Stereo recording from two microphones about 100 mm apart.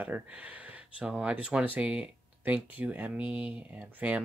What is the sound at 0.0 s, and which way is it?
Speech, 15° right (ahead or behind).